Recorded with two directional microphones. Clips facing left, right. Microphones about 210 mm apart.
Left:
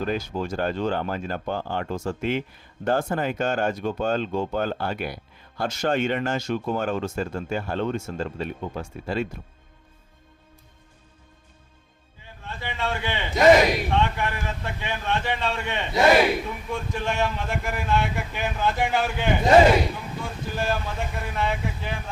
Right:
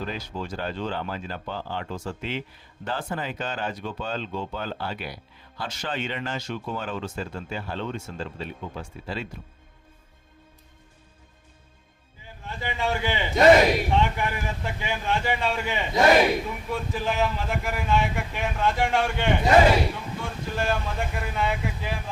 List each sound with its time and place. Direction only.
0.0 s speech: 50° left (ahead or behind)
12.5 s a man's voice: 15° right (ahead or behind)
13.3 s speech: centre (ahead or behind)
13.9 s a man's voice: 10° right (ahead or behind)